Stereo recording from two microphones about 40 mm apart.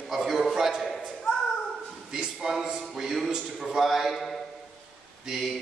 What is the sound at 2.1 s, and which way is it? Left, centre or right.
A man's voice, centre.